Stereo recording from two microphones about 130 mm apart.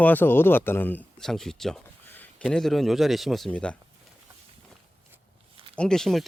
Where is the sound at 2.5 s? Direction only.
5° left (ahead or behind).